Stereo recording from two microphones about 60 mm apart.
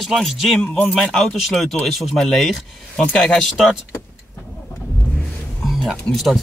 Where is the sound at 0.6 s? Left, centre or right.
Centre.